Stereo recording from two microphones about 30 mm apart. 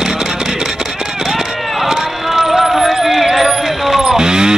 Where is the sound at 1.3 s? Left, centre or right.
Centre.